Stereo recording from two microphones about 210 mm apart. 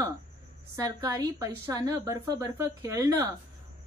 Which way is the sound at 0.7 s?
15° right (ahead or behind).